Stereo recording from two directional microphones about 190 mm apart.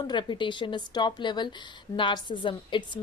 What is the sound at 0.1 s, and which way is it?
Speech, 25° left (ahead or behind).